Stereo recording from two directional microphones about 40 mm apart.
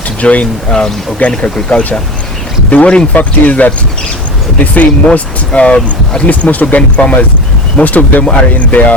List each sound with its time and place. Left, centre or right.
0.2 s speech: left
0.7 s speech: centre
1.2 s speech: left
3.2 s speech: left
5.0 s speech: left